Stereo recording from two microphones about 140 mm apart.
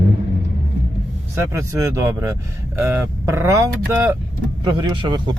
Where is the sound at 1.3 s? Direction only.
20° right (ahead or behind).